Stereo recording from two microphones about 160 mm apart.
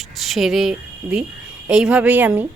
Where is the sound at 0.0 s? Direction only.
Centre (ahead or behind).